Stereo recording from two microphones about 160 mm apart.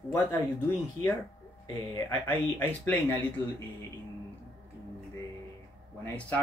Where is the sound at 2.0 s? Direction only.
15° left (ahead or behind).